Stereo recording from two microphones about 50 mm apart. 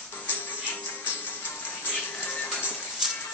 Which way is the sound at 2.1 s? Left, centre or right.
Left.